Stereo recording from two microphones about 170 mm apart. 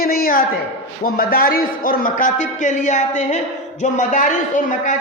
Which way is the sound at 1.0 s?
60° left (ahead or behind).